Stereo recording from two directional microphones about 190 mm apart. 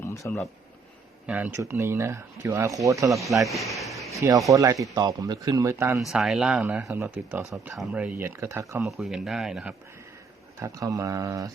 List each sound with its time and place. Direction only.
0.0 s a sound: 15° left (ahead or behind)
1.3 s speech: 10° right (ahead or behind)
3.5 s a sound: centre (ahead or behind)
4.2 s speech: 15° right (ahead or behind)
6.0 s speech: centre (ahead or behind)
8.8 s speech: centre (ahead or behind)
10.6 s speech: 15° right (ahead or behind)